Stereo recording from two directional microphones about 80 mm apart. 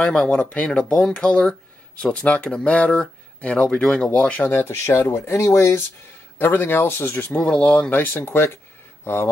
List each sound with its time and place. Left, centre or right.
0.0 s speech: centre
4.5 s speech: left
7.3 s speech: centre
8.0 s speech: left